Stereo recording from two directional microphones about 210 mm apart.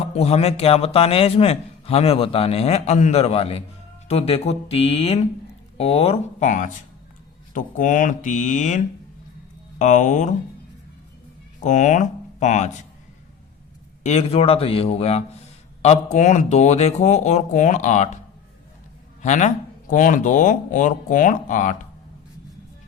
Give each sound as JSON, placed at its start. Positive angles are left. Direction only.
{"t": 0.2, "sound": "a man's voice", "side_deg": 30}
{"t": 11.6, "sound": "speech", "side_deg": 35}
{"t": 14.0, "sound": "a man's voice", "side_deg": 30}
{"t": 19.2, "sound": "speech", "side_deg": 35}